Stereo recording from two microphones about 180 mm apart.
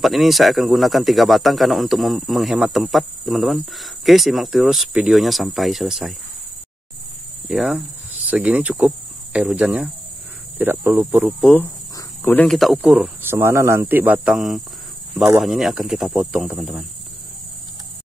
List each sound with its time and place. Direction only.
0.0 s speech: centre (ahead or behind)
7.4 s speech: 5° right (ahead or behind)
12.2 s speech: 10° left (ahead or behind)